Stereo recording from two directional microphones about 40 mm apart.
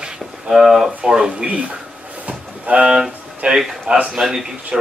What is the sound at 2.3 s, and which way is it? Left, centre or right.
Music, right.